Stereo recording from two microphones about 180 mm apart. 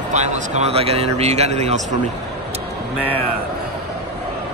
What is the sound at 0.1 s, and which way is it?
Speech, 40° right (ahead or behind).